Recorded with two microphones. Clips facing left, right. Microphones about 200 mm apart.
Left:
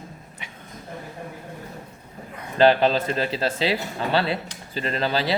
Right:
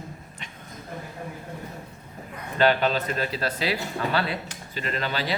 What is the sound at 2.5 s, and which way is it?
Speech, 30° left (ahead or behind).